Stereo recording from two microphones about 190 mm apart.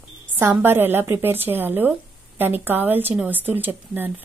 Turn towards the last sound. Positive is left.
turn(degrees=-10)  # may be behind; listen again after turning